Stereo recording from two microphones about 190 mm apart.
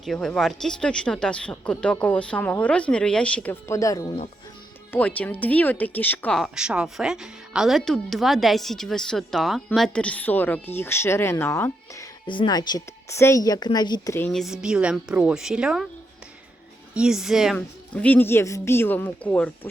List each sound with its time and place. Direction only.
0.0 s speech: 5° left (ahead or behind); by 4.2 s 20° left (ahead or behind)
4.9 s speech: 10° left (ahead or behind)
12.2 s a woman's voice: 25° left (ahead or behind)
14.3 s speech: centre (ahead or behind)
16.9 s speech: 5° right (ahead or behind)